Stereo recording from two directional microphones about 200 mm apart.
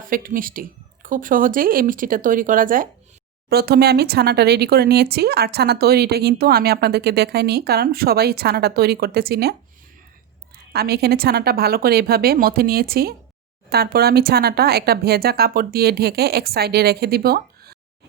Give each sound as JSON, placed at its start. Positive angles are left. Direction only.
{"t": 0.1, "sound": "speech", "side_deg": -45}
{"t": 10.7, "sound": "speech", "side_deg": -50}